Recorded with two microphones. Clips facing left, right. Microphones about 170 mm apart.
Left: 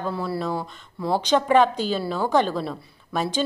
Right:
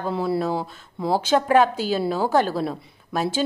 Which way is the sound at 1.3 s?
5° right (ahead or behind).